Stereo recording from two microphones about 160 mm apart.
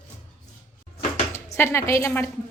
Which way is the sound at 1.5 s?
15° left (ahead or behind).